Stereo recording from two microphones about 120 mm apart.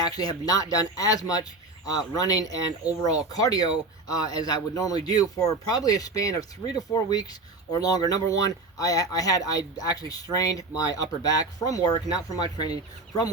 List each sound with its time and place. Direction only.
0.0 s speech: 35° left (ahead or behind)